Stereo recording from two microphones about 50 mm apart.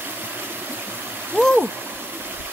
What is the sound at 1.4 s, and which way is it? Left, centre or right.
Stream, right.